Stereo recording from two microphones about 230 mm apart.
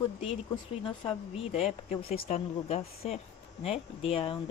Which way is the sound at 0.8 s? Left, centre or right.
Left.